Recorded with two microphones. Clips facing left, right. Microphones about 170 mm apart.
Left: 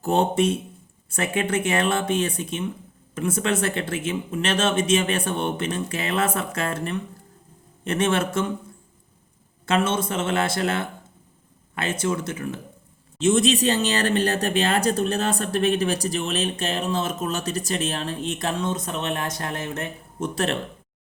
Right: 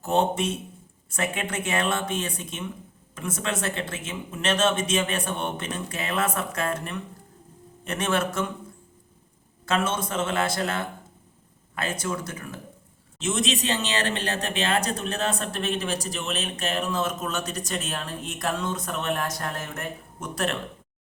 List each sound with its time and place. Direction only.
0.0 s speech: 30° left (ahead or behind)
9.6 s speech: 25° left (ahead or behind)